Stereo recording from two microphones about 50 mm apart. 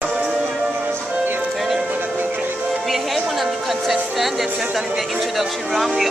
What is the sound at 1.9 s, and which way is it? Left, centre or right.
Music, right.